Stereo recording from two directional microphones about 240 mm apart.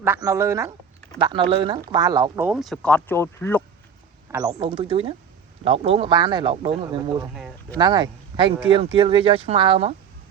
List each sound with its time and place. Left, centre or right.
0.0 s speech: centre
2.5 s speech: centre
4.3 s speech: centre
7.3 s speech: centre
7.8 s speech: centre